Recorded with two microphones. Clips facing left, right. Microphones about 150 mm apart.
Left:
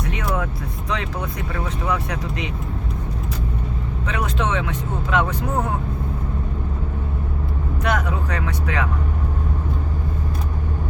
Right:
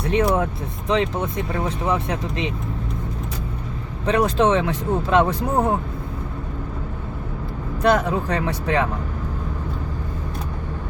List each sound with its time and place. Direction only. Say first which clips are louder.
0.0 s vehicle: right 6 dB; 30° right (ahead or behind)
0.9 s speech: right 7 dB; 20° right (ahead or behind)
4.0 s speech: right 7 dB; 35° right (ahead or behind)
7.8 s speech: right 6 dB; 30° right (ahead or behind)